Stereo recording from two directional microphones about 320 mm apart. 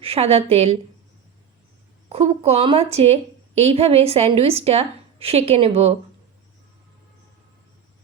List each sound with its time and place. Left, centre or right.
0.0 s a woman's voice: centre
2.0 s a woman's voice: centre